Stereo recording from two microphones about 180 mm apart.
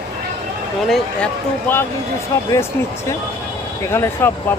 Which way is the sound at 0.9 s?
5° left (ahead or behind).